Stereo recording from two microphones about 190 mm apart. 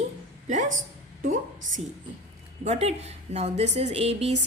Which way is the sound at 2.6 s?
35° right (ahead or behind).